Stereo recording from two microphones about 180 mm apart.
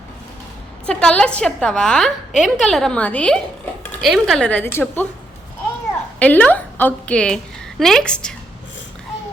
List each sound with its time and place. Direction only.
0.9 s a woman's voice: 5° left (ahead or behind)
6.1 s a woman's voice: 10° left (ahead or behind)